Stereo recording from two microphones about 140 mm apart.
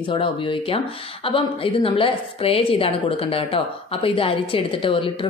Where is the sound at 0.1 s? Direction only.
40° left (ahead or behind).